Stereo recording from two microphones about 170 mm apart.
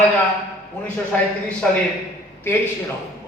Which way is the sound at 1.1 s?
5° left (ahead or behind).